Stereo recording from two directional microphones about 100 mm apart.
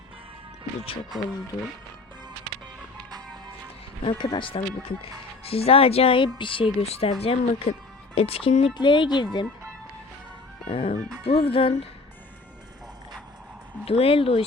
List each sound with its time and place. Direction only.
4.0 s speech: 55° left (ahead or behind); by 7.1 s 80° left
7.2 s speech: 70° left (ahead or behind)
8.1 s speech: 80° left
8.8 s speech: 50° left (ahead or behind)
10.7 s speech: 70° left (ahead or behind)
13.8 s speech: 75° left (ahead or behind)